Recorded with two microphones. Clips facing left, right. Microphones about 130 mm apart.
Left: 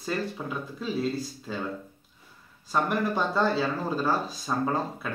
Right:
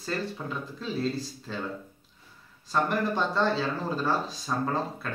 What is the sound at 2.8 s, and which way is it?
Speech, 10° left (ahead or behind).